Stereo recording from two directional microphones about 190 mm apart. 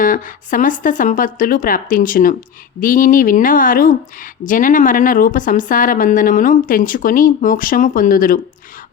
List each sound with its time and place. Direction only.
0.0 s speech: 45° left (ahead or behind)